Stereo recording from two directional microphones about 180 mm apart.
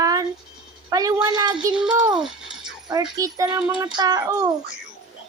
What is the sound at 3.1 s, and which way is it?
Speech, 20° right (ahead or behind).